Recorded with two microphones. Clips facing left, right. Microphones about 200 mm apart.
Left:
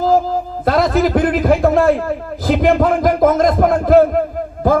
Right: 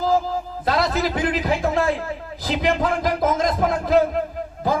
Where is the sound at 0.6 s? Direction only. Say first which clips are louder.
Left 7 dB; 50° left (ahead or behind).